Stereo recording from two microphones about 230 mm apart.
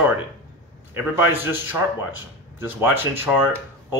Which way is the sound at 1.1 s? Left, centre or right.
Centre.